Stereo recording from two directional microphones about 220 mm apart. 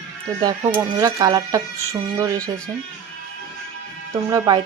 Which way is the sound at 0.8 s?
15° right (ahead or behind).